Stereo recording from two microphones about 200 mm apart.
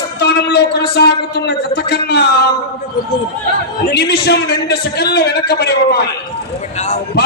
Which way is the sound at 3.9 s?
55° left (ahead or behind).